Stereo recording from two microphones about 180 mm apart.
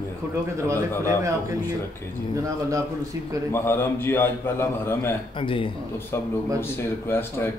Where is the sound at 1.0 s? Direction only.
15° right (ahead or behind).